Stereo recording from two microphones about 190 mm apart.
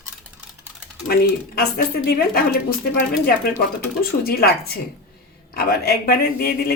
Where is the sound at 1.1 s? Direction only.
50° left (ahead or behind).